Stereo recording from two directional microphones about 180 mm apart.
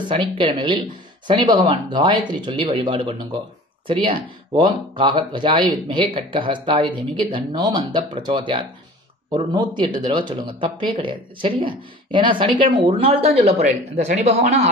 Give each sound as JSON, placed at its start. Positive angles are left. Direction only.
{"t": 0.4, "sound": "speech", "side_deg": -30}
{"t": 4.6, "sound": "speech", "side_deg": -25}